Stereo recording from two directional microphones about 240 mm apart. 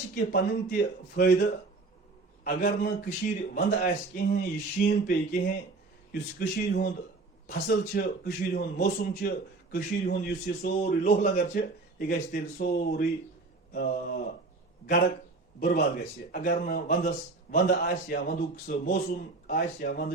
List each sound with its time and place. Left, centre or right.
0.1 s a man's voice: left
16.3 s a man's voice: left